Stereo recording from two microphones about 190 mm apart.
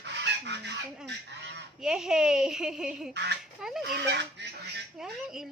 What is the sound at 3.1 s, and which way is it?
Speech, 65° right (ahead or behind).